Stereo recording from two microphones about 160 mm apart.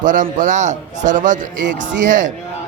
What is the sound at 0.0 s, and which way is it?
A man's voice, 55° right (ahead or behind).